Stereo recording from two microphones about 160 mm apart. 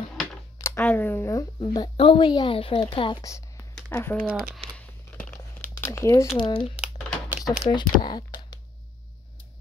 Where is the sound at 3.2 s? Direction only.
20° left (ahead or behind).